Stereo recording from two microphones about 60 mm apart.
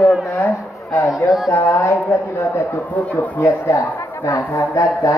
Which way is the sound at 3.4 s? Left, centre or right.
Left.